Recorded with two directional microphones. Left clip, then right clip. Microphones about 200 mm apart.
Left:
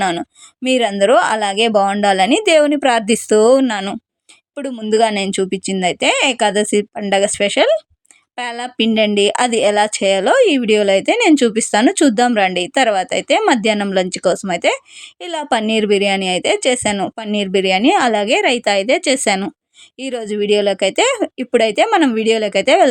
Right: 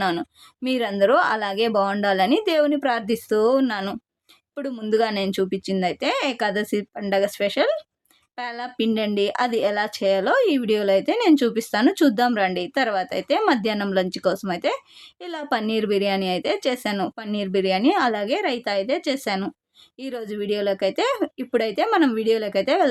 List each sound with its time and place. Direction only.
0.0 s speech: 20° left (ahead or behind)